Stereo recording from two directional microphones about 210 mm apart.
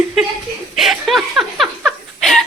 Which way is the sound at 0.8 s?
Centre (ahead or behind).